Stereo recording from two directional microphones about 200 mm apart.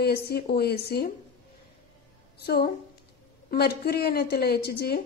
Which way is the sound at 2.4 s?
50° left (ahead or behind).